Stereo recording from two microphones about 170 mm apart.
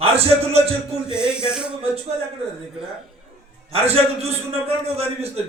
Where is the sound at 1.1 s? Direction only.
5° right (ahead or behind).